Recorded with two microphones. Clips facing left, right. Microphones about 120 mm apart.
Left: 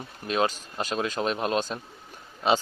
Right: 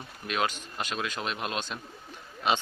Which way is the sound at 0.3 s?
35° left (ahead or behind).